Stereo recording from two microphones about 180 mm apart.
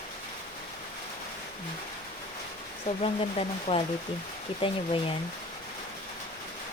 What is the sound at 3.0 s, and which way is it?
Speech, 30° left (ahead or behind).